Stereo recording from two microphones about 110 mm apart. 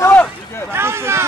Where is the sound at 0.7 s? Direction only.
25° right (ahead or behind).